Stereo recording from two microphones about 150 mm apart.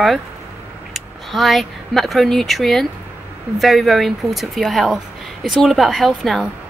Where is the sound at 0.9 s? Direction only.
Centre (ahead or behind).